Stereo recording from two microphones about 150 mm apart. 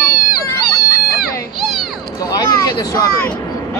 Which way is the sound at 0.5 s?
25° left (ahead or behind).